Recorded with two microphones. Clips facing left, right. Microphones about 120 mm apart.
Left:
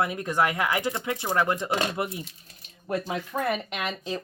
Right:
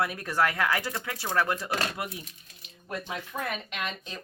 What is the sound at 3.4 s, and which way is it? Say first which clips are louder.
Speech: left 7 dB; 35° left (ahead or behind).